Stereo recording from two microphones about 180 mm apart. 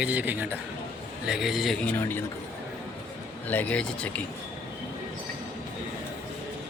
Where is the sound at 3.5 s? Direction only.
10° left (ahead or behind).